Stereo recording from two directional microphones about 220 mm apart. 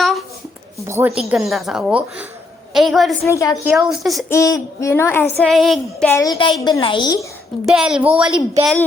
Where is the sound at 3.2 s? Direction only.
15° left (ahead or behind).